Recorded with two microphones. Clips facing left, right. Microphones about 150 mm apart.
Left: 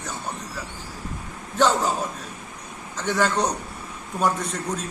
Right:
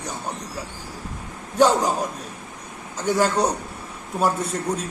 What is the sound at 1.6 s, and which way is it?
Speech, 10° right (ahead or behind).